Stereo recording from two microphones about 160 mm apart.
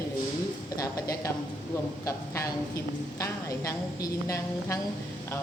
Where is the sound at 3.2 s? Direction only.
20° left (ahead or behind).